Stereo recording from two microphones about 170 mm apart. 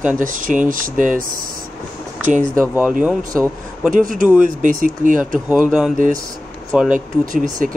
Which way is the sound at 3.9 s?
50° right (ahead or behind).